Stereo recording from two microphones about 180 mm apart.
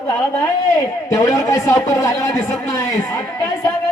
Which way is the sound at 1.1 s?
20° left (ahead or behind).